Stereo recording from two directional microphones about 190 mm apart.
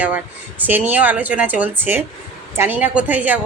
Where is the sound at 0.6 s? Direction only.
10° right (ahead or behind).